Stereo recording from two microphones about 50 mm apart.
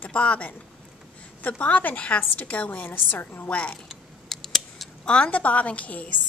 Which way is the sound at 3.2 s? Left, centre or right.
Left.